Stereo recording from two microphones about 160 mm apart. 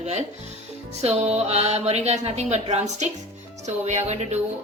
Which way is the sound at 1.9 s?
40° right (ahead or behind).